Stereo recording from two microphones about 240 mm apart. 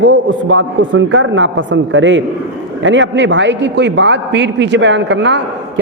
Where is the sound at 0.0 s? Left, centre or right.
Right.